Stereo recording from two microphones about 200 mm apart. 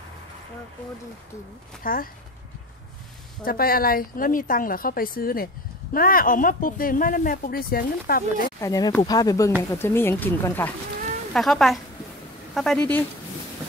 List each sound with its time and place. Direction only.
1.8 s speech: 45° left (ahead or behind)
3.4 s speech: 45° left (ahead or behind)
8.5 s a woman's voice: 15° left (ahead or behind)